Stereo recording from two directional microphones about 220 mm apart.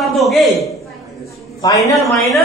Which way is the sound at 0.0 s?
Centre (ahead or behind).